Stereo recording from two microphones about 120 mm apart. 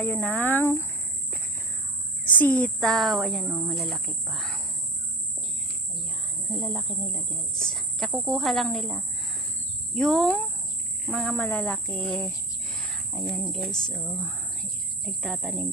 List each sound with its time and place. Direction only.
0.0 s speech: 15° left (ahead or behind)
2.3 s speech: 15° left (ahead or behind)
2.9 s speech: centre (ahead or behind)
6.6 s speech: centre (ahead or behind)
14.6 s a sound: 5° left (ahead or behind)